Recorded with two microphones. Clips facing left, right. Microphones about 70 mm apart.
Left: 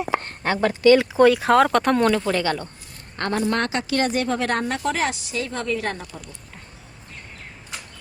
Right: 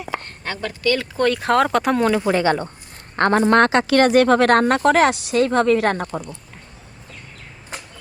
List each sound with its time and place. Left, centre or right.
0.2 s speech: left; by 2.2 s centre
2.2 s speech: right
3.2 s a woman's voice: right
3.6 s speech: right
7.7 s a sound: right